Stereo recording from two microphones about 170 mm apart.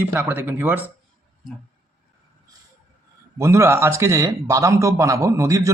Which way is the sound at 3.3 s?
15° right (ahead or behind).